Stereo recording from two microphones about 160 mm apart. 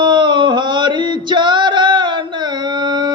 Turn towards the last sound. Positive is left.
turn(degrees=-30)  # may be behind; listen again after turning